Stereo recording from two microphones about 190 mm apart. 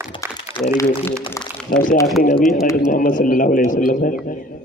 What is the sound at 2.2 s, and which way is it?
A man's voice, 45° left (ahead or behind).